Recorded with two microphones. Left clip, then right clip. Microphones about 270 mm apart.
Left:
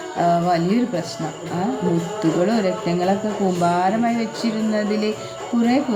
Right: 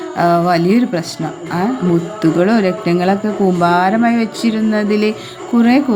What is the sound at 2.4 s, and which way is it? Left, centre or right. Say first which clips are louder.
Speech: right 6 dB; right.